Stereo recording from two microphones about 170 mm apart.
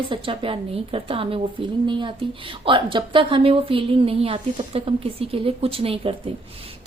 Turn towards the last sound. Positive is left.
turn(degrees=-35)  # may be behind; listen again after turning